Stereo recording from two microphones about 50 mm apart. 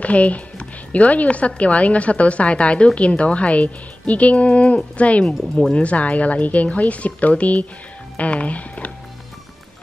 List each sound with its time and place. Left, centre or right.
0.0 s speech: left